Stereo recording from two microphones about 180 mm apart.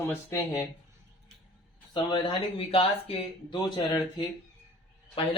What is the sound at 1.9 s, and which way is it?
Speech, 25° left (ahead or behind).